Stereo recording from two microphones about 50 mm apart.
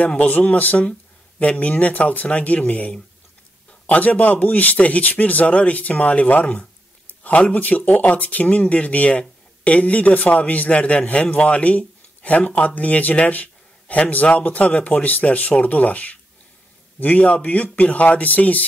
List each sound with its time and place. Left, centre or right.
0.1 s a man's voice: left